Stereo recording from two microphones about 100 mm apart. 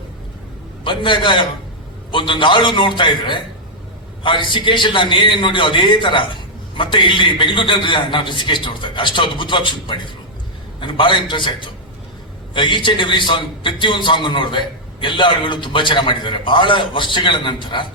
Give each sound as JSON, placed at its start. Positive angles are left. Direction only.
{"t": 0.9, "sound": "a man's voice", "side_deg": 55}